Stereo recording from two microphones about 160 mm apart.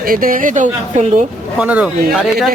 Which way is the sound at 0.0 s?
65° right (ahead or behind).